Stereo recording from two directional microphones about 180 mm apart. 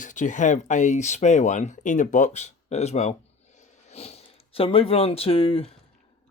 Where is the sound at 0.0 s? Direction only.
45° left (ahead or behind).